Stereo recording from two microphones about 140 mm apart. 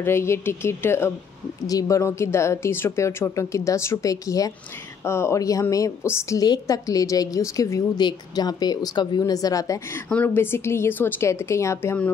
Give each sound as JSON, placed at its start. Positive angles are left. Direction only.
{"t": 0.0, "sound": "a woman's voice", "side_deg": 20}
{"t": 10.0, "sound": "a woman's voice", "side_deg": 10}